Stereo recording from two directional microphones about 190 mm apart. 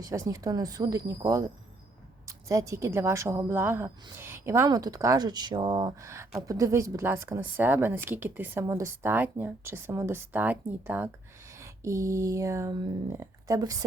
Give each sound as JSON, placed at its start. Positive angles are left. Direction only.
{"t": 0.0, "sound": "speech", "side_deg": -15}